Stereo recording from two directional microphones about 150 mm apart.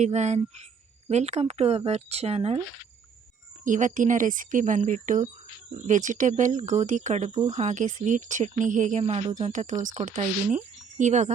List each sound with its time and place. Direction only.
0.0 s speech: 50° right (ahead or behind)
3.6 s speech: 55° right (ahead or behind)